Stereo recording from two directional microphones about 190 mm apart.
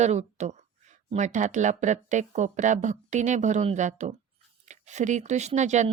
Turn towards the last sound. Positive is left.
turn(degrees=-40)  # may be behind; listen again after turning